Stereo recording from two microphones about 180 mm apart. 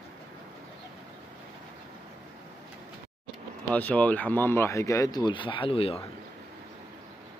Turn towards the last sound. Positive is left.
turn(degrees=30)  # may be behind; listen again after turning